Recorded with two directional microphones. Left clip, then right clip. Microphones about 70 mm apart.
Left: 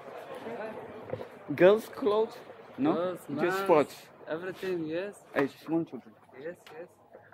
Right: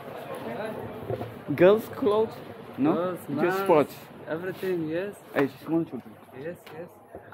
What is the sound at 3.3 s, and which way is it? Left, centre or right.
Speech, centre.